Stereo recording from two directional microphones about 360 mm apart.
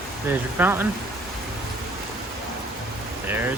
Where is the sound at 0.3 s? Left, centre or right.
Centre.